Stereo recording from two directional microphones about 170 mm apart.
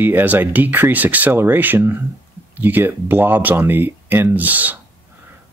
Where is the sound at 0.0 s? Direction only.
10° right (ahead or behind).